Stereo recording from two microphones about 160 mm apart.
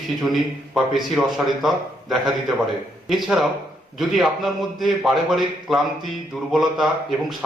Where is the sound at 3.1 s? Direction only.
Centre (ahead or behind).